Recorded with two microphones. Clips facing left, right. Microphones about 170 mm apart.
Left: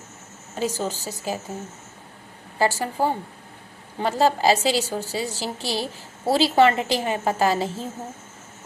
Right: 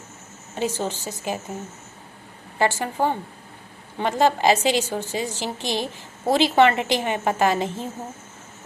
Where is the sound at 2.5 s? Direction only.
35° left (ahead or behind).